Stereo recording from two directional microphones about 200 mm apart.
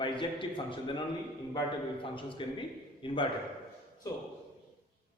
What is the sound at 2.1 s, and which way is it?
A man's voice, 25° left (ahead or behind).